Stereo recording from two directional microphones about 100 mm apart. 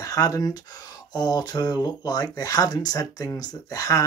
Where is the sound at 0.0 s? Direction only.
35° left (ahead or behind).